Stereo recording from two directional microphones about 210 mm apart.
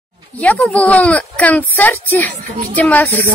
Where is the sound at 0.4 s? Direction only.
5° left (ahead or behind).